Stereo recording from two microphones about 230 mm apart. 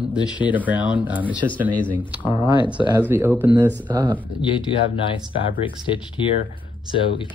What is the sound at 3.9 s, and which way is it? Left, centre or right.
Speech, centre.